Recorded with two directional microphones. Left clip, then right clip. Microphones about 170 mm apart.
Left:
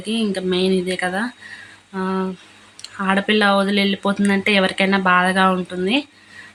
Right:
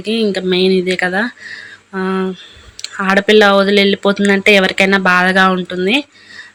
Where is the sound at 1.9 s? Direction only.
25° right (ahead or behind).